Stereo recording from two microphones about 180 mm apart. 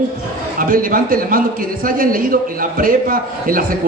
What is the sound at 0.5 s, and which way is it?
A man's voice, 50° right (ahead or behind).